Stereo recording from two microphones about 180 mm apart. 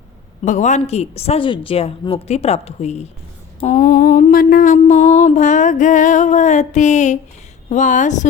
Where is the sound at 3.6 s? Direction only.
45° left (ahead or behind).